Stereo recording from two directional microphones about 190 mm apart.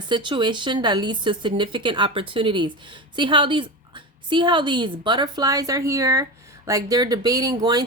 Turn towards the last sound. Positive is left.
turn(degrees=-20)  # may be behind; listen again after turning